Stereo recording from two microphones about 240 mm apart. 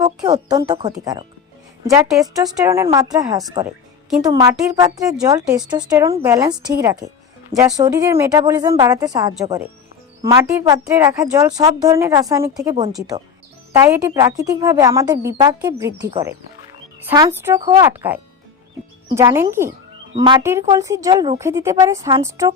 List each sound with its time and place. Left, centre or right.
0.7 s a woman's voice: centre